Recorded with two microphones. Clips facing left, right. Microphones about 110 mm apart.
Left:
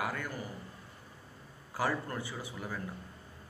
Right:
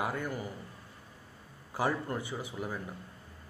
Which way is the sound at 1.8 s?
20° right (ahead or behind).